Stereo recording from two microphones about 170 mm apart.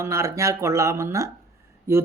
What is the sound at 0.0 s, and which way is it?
Speech, 15° right (ahead or behind).